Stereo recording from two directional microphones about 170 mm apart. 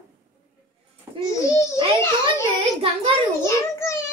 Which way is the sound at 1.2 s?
20° left (ahead or behind).